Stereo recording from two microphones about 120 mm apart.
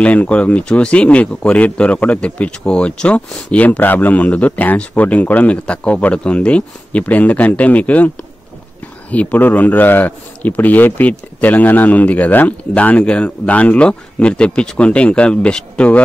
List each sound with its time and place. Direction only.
0.0 s a man's voice: 10° left (ahead or behind)
9.1 s a man's voice: 15° left (ahead or behind)